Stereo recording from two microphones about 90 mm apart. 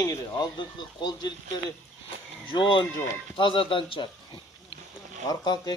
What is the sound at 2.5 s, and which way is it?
Speech, 65° left (ahead or behind).